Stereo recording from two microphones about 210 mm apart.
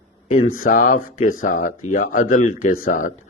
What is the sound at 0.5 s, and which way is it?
Speech, 40° left (ahead or behind).